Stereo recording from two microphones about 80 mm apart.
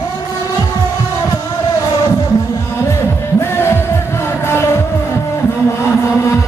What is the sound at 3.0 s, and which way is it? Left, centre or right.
Music, left.